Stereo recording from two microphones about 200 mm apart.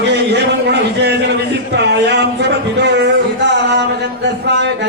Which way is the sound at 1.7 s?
60° right (ahead or behind).